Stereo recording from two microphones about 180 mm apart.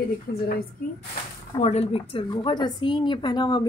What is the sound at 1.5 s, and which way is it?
A woman's voice, 35° left (ahead or behind).